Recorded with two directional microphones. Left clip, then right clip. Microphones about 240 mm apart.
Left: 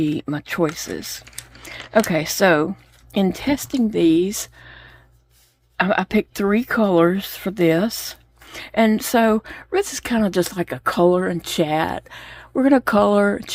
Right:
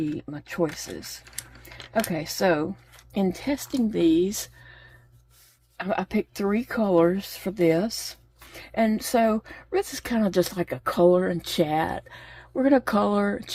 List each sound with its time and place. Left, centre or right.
0.0 s speech: left